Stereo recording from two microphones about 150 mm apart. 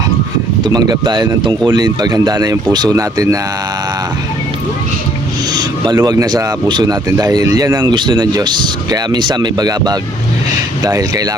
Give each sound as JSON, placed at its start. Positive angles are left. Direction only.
{"t": 0.6, "sound": "speech", "side_deg": -25}
{"t": 5.5, "sound": "a sound", "side_deg": -30}
{"t": 6.0, "sound": "speech", "side_deg": -25}